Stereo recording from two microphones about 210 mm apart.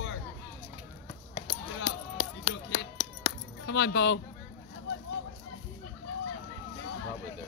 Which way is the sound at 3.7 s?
55° left (ahead or behind).